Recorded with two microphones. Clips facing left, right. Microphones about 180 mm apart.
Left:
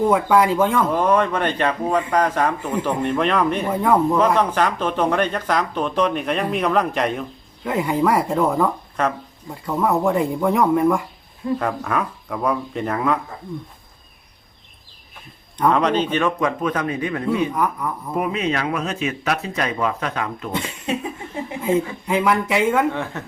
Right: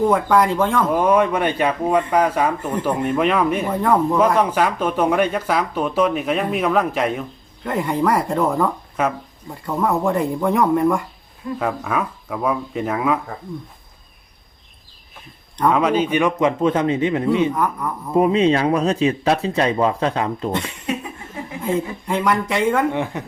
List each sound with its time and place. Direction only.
0.0 s speech: centre (ahead or behind)
3.7 s speech: 5° left (ahead or behind)
4.4 s speech: 10° right (ahead or behind)
15.5 s speech: centre (ahead or behind)
16.4 s speech: 25° right (ahead or behind)
17.5 s speech: centre (ahead or behind)
18.1 s speech: 30° right (ahead or behind)
20.9 s laughter: 25° left (ahead or behind)
21.6 s speech: centre (ahead or behind)
22.9 s speech: 15° right (ahead or behind)